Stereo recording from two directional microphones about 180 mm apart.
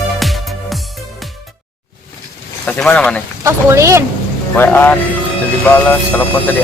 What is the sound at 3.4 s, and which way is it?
Speech, 15° right (ahead or behind).